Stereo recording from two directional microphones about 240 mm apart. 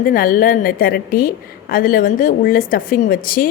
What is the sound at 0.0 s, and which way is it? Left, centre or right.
A woman's voice, left.